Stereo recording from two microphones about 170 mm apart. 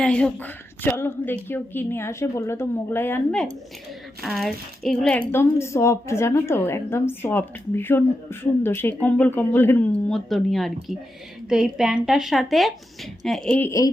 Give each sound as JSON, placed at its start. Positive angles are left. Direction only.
{"t": 0.0, "sound": "a woman's voice", "side_deg": 5}